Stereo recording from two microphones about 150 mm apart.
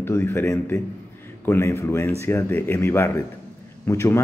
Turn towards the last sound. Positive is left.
turn(degrees=15)  # may be behind; listen again after turning